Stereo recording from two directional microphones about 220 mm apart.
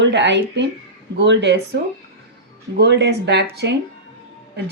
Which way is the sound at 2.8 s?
50° right (ahead or behind).